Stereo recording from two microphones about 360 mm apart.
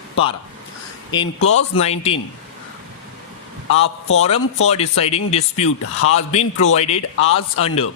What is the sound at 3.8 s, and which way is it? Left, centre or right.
Speech, left.